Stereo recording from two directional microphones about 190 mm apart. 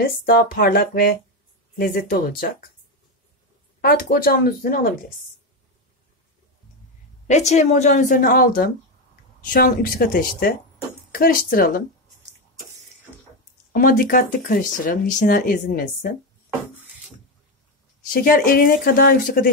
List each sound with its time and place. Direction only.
0.0 s speech: 50° left (ahead or behind)
3.8 s speech: 50° left (ahead or behind)
7.2 s a woman's voice: 35° left (ahead or behind)
13.7 s speech: 50° left (ahead or behind)
18.1 s speech: 50° left (ahead or behind)